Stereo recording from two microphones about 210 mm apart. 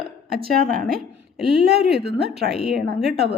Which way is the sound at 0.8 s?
Centre (ahead or behind).